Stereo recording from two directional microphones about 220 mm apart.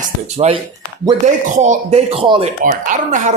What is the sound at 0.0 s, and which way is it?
Speech, 30° right (ahead or behind).